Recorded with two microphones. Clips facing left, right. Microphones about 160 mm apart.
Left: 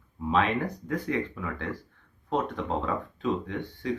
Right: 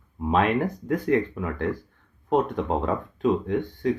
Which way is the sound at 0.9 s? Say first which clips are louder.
Right 9 dB; 45° right (ahead or behind).